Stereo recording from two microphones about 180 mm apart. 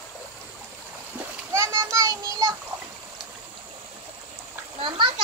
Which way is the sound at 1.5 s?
15° right (ahead or behind).